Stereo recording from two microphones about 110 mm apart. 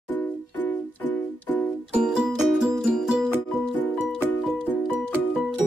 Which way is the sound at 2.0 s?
5° right (ahead or behind).